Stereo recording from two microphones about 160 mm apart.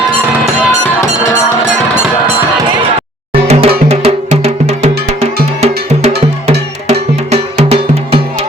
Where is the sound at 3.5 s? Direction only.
35° right (ahead or behind).